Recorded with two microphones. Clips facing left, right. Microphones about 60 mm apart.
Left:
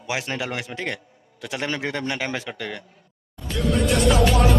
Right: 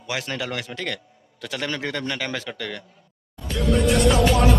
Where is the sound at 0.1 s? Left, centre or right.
Left.